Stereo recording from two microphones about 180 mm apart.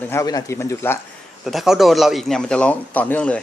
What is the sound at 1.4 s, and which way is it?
Speech, centre (ahead or behind).